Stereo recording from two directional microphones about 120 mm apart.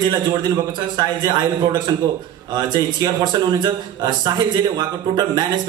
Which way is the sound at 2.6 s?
35° right (ahead or behind).